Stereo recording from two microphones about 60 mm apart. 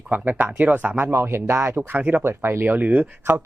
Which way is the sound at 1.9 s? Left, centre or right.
Right.